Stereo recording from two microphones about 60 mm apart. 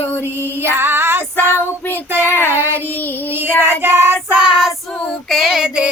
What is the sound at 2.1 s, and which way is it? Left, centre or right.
Child singing, right.